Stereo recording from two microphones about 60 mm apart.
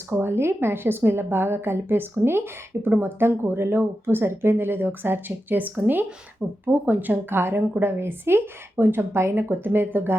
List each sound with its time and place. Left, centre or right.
0.1 s a woman's voice: right
6.4 s speech: centre
6.8 s a woman's voice: right